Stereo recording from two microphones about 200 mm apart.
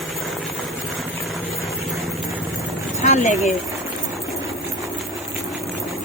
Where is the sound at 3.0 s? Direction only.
35° left (ahead or behind).